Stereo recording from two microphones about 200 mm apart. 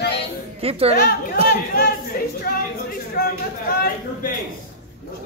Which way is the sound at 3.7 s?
45° left (ahead or behind).